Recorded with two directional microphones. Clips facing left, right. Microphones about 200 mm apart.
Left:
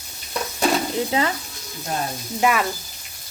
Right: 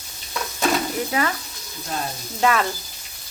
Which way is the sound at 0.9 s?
25° left (ahead or behind).